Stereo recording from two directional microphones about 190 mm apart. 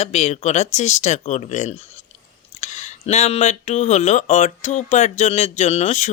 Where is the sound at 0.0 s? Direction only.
35° left (ahead or behind).